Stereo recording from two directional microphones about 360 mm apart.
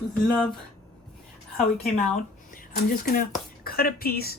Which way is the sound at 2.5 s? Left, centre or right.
Left.